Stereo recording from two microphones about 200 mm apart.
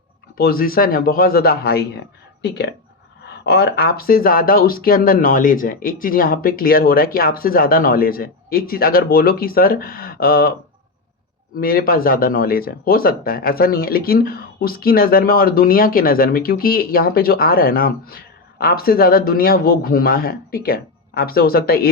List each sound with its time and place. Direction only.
0.3 s speech: 50° left (ahead or behind)
3.2 s speech: 55° left (ahead or behind)
11.6 s speech: 45° left (ahead or behind)